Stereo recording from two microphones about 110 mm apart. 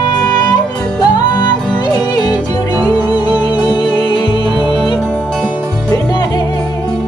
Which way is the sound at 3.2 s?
45° left (ahead or behind).